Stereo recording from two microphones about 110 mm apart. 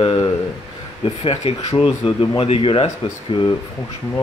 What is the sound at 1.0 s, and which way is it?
Speech, 65° left (ahead or behind).